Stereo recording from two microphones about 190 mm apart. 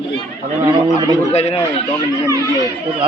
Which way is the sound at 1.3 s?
35° left (ahead or behind).